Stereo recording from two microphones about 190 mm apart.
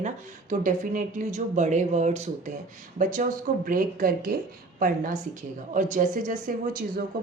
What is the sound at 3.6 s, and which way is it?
Speech, 50° right (ahead or behind).